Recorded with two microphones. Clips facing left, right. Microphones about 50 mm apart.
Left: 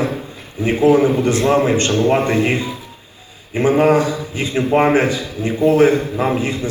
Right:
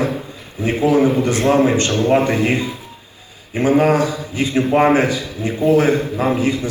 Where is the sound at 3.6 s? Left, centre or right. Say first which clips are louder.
Even; left.